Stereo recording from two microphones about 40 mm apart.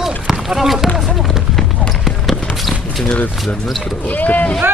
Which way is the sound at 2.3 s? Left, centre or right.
Centre.